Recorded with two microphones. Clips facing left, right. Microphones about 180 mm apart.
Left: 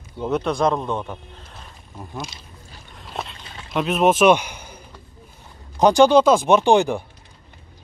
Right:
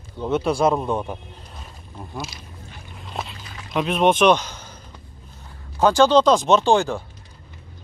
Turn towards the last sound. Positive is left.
turn(degrees=15)  # may be behind; listen again after turning